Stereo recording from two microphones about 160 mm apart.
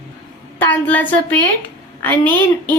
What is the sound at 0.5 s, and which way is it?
A woman's voice, 10° left (ahead or behind).